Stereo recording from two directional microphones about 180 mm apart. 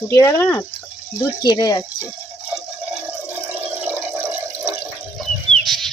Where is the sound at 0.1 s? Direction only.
15° left (ahead or behind).